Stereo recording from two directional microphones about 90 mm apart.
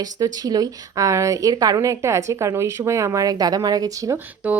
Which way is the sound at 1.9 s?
35° right (ahead or behind).